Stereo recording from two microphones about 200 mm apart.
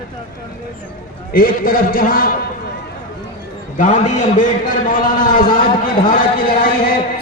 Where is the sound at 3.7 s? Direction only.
40° left (ahead or behind).